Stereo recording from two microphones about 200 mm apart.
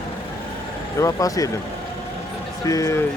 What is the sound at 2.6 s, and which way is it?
Speech, 15° left (ahead or behind).